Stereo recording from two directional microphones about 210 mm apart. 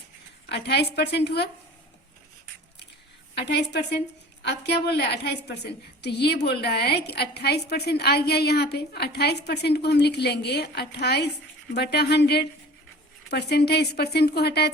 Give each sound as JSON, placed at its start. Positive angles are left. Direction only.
{"t": 0.4, "sound": "a woman's voice", "side_deg": 55}
{"t": 3.4, "sound": "a woman's voice", "side_deg": 55}